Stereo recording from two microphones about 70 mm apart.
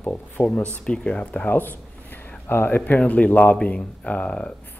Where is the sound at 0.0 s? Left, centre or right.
Centre.